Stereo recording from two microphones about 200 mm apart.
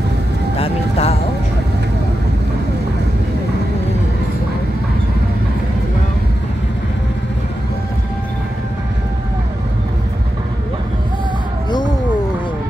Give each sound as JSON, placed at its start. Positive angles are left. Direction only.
{"t": 0.6, "sound": "music", "side_deg": 30}